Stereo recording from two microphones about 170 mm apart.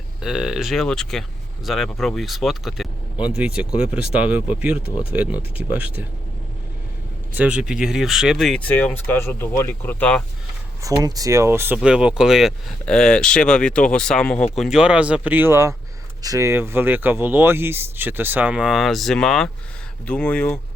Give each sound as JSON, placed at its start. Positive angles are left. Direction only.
{"t": 0.2, "sound": "speech", "side_deg": -5}
{"t": 7.3, "sound": "speech", "side_deg": -5}
{"t": 10.8, "sound": "speech", "side_deg": -20}